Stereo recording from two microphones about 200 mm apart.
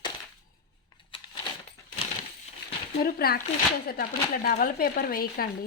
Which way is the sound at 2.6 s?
55° left (ahead or behind).